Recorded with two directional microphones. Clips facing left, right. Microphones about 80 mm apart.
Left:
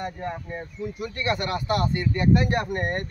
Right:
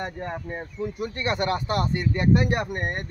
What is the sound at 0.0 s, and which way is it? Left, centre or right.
Speech, right.